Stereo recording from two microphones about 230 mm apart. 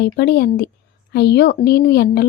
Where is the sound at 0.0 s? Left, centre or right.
Left.